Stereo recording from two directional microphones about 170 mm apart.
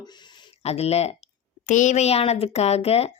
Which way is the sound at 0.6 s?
40° left (ahead or behind).